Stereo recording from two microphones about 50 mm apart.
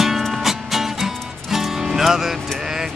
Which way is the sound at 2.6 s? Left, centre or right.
Centre.